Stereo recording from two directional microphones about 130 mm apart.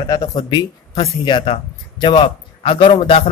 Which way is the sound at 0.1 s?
30° left (ahead or behind).